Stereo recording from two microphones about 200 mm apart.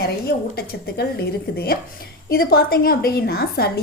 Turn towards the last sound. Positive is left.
turn(degrees=50)  # may be behind; listen again after turning